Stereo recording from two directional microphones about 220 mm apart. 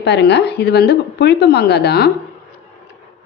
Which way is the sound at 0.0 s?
50° left (ahead or behind).